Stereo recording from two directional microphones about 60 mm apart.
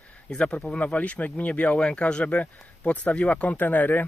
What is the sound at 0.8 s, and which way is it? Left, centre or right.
Speech, left.